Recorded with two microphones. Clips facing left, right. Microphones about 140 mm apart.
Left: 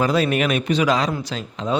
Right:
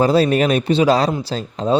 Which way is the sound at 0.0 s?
30° right (ahead or behind).